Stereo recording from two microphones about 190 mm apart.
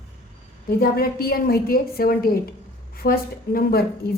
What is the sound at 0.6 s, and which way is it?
A woman's voice, 55° left (ahead or behind).